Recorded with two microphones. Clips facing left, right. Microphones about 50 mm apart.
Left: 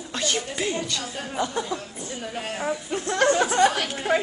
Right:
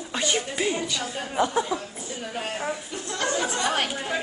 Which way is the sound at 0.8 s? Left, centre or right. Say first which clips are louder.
Right 1 dB; centre.